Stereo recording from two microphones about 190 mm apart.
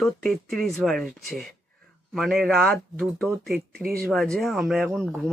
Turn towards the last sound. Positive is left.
turn(degrees=0)  # may be behind; listen again after turning